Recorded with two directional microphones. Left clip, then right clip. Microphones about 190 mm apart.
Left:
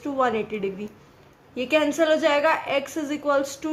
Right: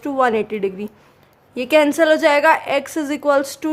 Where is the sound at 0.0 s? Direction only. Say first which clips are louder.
Right 6 dB; 40° right (ahead or behind).